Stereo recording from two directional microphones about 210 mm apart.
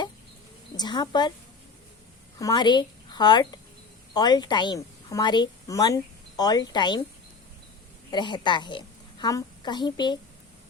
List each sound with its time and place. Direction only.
0.8 s a woman's voice: 20° left (ahead or behind)
2.4 s a woman's voice: 20° left (ahead or behind)
8.1 s a woman's voice: 20° left (ahead or behind)